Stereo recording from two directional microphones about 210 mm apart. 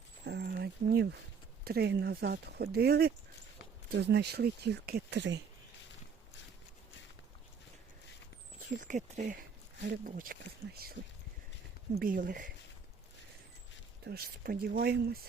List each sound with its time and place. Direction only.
0.3 s a sound: 50° right (ahead or behind)
1.6 s speech: 50° right (ahead or behind)
8.8 s speech: 35° right (ahead or behind)
11.9 s speech: 40° right (ahead or behind)
14.0 s speech: 50° right (ahead or behind)